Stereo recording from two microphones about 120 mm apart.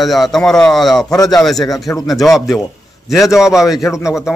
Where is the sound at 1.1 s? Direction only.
30° left (ahead or behind).